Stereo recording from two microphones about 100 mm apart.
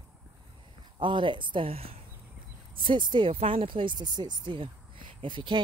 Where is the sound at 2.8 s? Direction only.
50° right (ahead or behind).